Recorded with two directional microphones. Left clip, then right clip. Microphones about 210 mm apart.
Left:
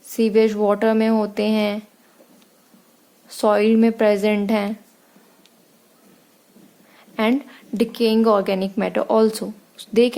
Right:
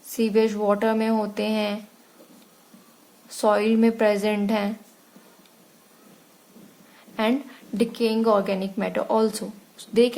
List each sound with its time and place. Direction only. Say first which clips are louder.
0.0 s speech: left 4 dB; 30° left (ahead or behind)
3.2 s speech: left 4 dB; 25° left (ahead or behind)
6.9 s a woman's voice: left 3 dB; 30° left (ahead or behind)